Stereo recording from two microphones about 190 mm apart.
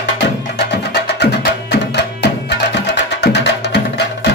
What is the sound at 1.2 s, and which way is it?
Music, 60° left (ahead or behind).